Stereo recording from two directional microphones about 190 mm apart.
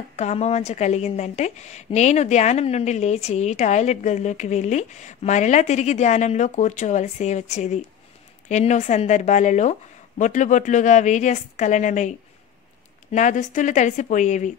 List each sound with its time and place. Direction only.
0.1 s a woman's voice: 35° left (ahead or behind)